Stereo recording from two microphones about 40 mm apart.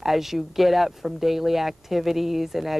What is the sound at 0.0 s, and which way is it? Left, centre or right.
Speech, centre.